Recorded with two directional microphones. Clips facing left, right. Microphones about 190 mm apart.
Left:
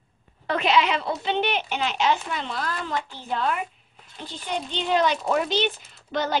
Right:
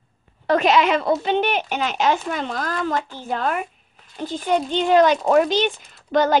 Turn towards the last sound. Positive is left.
turn(degrees=-45)  # may be behind; listen again after turning